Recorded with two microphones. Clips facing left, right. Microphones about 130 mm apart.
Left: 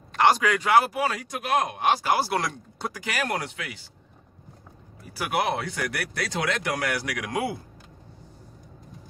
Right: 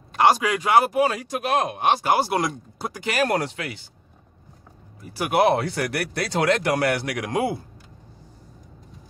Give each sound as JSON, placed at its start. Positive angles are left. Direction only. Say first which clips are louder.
{"t": 0.1, "sound": "speech", "louder": "right 2 dB", "side_deg": -15}
{"t": 2.9, "sound": "speech", "louder": "right 7 dB", "side_deg": -30}
{"t": 5.1, "sound": "speech", "louder": "right 7 dB", "side_deg": -25}